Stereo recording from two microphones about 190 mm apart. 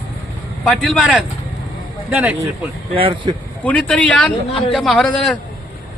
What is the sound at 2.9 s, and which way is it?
Speech, 30° right (ahead or behind).